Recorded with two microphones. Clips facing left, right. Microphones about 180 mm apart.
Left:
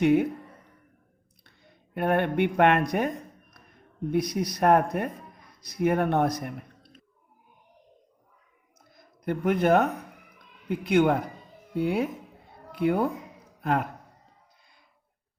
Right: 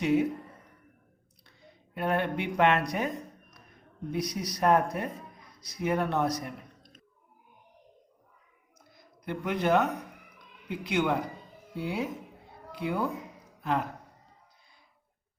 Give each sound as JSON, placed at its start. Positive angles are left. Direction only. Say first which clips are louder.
{"t": 0.0, "sound": "speech", "louder": "left 4 dB", "side_deg": 60}
{"t": 1.5, "sound": "speech", "louder": "right 2 dB", "side_deg": 55}
{"t": 4.1, "sound": "speech", "louder": "left 6 dB", "side_deg": 55}
{"t": 9.0, "sound": "speech", "louder": "left 6 dB", "side_deg": 50}
{"t": 10.3, "sound": "cat", "louder": "left 6 dB", "side_deg": 50}
{"t": 11.8, "sound": "speech", "louder": "left 6 dB", "side_deg": 55}